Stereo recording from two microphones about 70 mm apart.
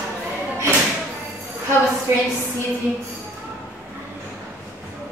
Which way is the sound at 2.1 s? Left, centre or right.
Right.